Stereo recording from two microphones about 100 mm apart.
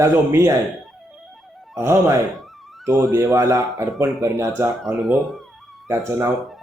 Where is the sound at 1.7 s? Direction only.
30° right (ahead or behind).